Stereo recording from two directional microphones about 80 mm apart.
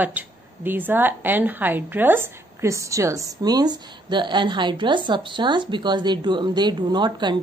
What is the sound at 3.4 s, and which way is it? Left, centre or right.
A woman's voice, right.